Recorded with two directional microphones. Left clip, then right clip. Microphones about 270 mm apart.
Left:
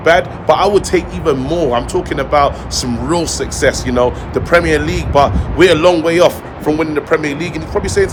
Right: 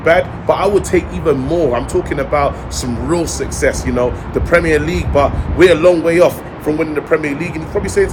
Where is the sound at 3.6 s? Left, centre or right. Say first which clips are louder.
Left 2 dB; centre.